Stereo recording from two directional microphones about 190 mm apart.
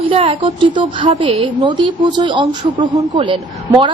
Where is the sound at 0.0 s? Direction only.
30° right (ahead or behind).